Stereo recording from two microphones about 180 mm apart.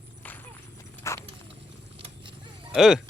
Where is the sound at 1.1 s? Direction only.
15° left (ahead or behind).